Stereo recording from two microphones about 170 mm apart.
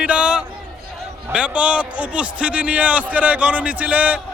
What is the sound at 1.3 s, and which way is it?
A man's voice, 5° right (ahead or behind).